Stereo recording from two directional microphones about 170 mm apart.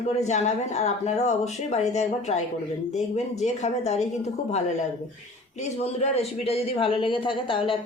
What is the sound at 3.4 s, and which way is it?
A man's voice, 40° left (ahead or behind).